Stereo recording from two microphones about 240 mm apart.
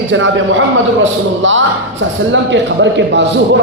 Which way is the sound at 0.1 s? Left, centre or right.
Right.